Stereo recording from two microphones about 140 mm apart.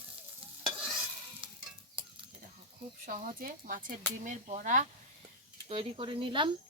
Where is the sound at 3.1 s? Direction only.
80° right.